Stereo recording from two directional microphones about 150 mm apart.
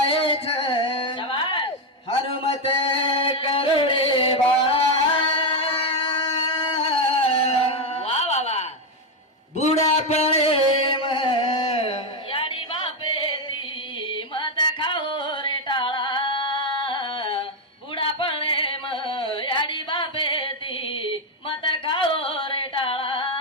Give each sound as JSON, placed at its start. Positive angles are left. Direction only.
{"t": 0.1, "sound": "singing", "side_deg": 40}
{"t": 2.0, "sound": "a sound", "side_deg": 40}
{"t": 5.4, "sound": "singing", "side_deg": 40}
{"t": 9.8, "sound": "music", "side_deg": 45}
{"t": 14.3, "sound": "music", "side_deg": 30}
{"t": 17.9, "sound": "a sound", "side_deg": 35}
{"t": 21.7, "sound": "singing", "side_deg": 35}